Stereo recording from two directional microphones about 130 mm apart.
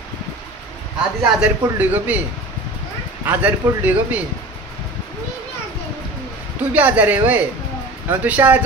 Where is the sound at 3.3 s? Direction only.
15° right (ahead or behind).